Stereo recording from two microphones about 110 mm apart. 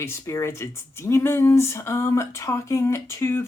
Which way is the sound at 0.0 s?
25° left (ahead or behind).